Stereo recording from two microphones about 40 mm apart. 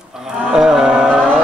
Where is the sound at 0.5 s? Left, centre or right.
Centre.